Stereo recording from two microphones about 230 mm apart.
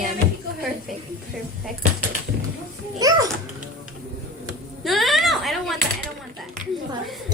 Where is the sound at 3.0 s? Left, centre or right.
Centre.